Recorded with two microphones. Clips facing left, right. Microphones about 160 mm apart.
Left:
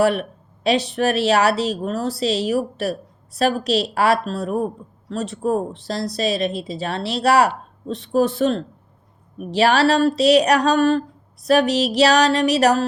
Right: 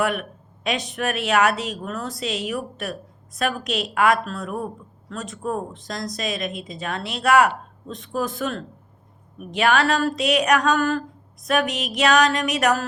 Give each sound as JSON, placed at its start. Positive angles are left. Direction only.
{"t": 0.0, "sound": "a woman's voice", "side_deg": 30}